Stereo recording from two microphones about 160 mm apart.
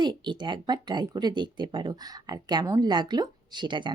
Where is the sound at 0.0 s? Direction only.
30° right (ahead or behind).